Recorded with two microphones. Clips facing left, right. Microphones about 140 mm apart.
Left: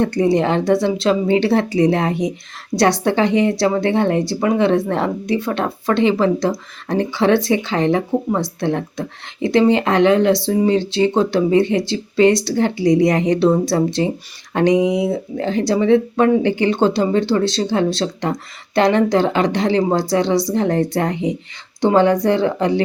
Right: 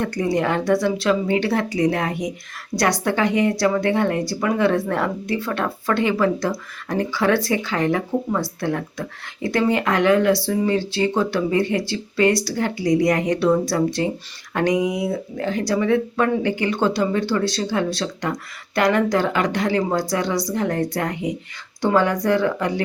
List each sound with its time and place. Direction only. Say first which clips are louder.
0.0 s speech: left 5 dB; 25° left (ahead or behind)